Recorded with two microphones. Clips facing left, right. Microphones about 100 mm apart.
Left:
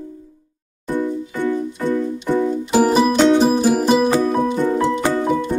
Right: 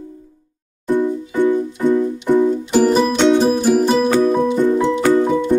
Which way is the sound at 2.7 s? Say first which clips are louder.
Left 2 dB; 10° left (ahead or behind).